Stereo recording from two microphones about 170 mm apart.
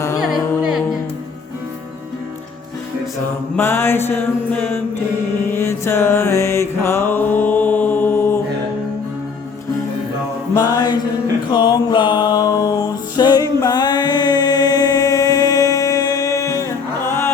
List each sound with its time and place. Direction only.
0.2 s music: 5° right (ahead or behind)
3.5 s mantra: 15° left (ahead or behind)
5.5 s music: 15° left (ahead or behind)
10.5 s mantra: 20° left (ahead or behind)
11.5 s music: 25° left (ahead or behind)